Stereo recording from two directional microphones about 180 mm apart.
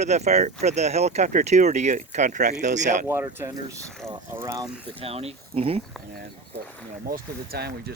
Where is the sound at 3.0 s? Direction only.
15° right (ahead or behind).